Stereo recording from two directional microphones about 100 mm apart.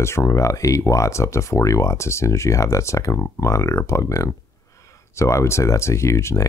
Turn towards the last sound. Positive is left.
turn(degrees=30)  # may be behind; listen again after turning